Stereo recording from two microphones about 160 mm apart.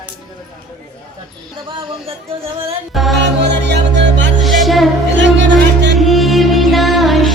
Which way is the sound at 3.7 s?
90° right.